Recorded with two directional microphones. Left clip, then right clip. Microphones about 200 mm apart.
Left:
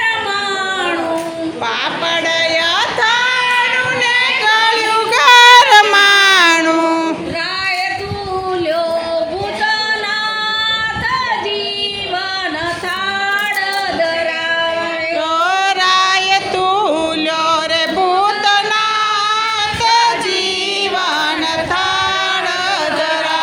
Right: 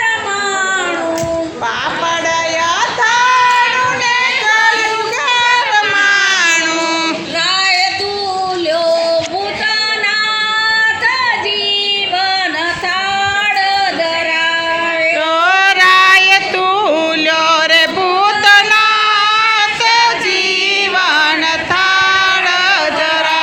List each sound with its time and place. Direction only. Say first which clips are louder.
3.0 s child singing: right 5 dB; 15° left (ahead or behind)
5.2 s baby cry: left 8 dB; 60° left (ahead or behind); by 6.6 s 80° left
15.4 s female singing: right 5 dB; 5° left (ahead or behind)
17.4 s a sound: right 5 dB; centre (ahead or behind)
21.8 s child singing: right 7 dB; centre (ahead or behind)